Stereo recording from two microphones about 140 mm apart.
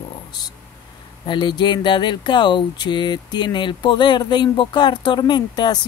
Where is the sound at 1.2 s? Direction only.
35° left (ahead or behind).